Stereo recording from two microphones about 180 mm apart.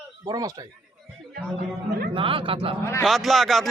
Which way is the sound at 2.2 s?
30° right (ahead or behind).